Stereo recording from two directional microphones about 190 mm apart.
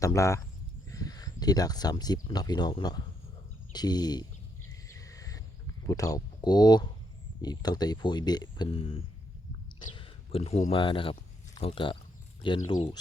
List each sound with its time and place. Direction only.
0.0 s speech: 15° left (ahead or behind)
4.9 s a sound: 15° left (ahead or behind)
5.9 s speech: 20° left (ahead or behind)